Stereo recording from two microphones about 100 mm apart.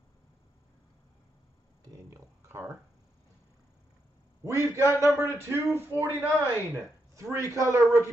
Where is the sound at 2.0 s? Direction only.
30° right (ahead or behind).